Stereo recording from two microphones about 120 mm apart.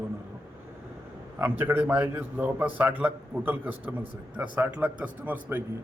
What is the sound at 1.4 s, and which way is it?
Speech, 15° right (ahead or behind).